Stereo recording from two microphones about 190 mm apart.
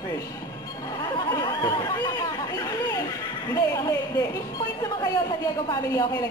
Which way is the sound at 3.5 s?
15° left (ahead or behind).